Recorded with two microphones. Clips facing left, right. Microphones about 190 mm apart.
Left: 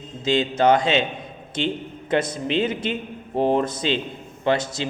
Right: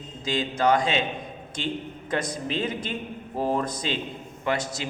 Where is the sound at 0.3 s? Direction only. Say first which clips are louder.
Left 5 dB; 25° left (ahead or behind).